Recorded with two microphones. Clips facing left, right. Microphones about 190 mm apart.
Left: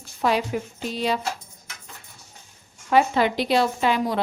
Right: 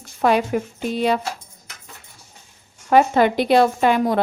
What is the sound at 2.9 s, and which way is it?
Speech, 50° right (ahead or behind).